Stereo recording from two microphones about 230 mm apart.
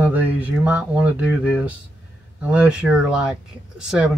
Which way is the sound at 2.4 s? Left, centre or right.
Centre.